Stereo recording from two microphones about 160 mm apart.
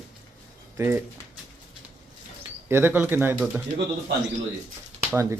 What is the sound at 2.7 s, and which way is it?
Speech, 15° right (ahead or behind).